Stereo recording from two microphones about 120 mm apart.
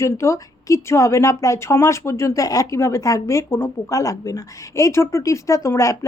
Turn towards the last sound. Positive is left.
turn(degrees=25)  # may be behind; listen again after turning